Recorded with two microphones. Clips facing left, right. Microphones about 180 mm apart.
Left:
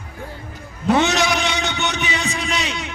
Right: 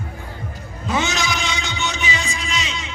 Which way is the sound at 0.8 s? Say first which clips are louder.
Left 6 dB; 65° left (ahead or behind).